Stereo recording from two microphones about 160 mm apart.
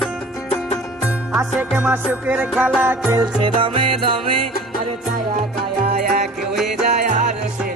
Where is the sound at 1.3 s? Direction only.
5° right (ahead or behind).